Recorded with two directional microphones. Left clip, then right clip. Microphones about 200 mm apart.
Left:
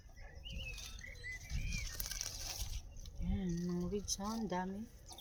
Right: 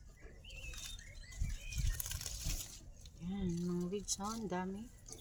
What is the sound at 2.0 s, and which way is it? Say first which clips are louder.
Bird flight: left 2 dB; 5° left (ahead or behind).